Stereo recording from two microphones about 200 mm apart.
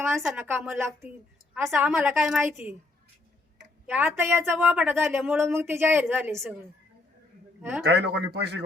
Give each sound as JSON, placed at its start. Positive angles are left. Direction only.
{"t": 0.2, "sound": "a woman's voice", "side_deg": -5}
{"t": 3.8, "sound": "a woman's voice", "side_deg": -10}
{"t": 7.6, "sound": "a woman's voice", "side_deg": -10}
{"t": 7.9, "sound": "speech", "side_deg": -55}